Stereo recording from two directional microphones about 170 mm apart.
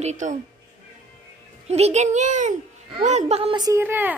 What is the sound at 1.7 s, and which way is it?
A child's voice, 40° right (ahead or behind).